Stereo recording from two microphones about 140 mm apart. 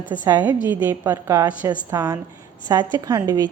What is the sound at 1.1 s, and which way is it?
A woman's voice, 25° right (ahead or behind).